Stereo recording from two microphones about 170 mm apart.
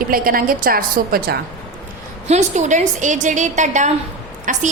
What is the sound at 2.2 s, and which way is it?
A woman's voice, 40° right (ahead or behind).